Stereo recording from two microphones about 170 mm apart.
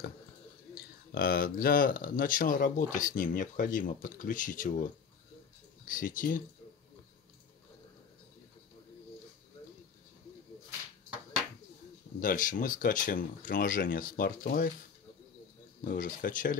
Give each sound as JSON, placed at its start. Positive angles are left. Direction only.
{"t": 1.1, "sound": "speech", "side_deg": 60}
{"t": 5.9, "sound": "speech", "side_deg": 50}
{"t": 12.2, "sound": "speech", "side_deg": 50}
{"t": 15.8, "sound": "speech", "side_deg": 55}